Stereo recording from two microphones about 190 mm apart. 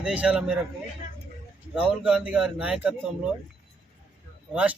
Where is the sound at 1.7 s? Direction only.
5° right (ahead or behind).